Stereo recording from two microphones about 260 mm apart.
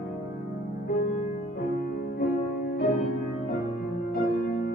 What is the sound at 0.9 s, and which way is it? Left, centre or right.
Music, left.